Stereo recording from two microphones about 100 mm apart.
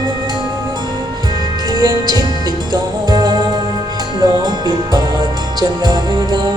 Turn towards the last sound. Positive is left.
turn(degrees=-45)  # may be behind; listen again after turning